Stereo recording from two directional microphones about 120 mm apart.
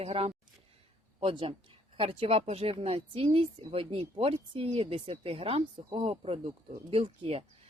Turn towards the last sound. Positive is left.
turn(degrees=-50)  # may be behind; listen again after turning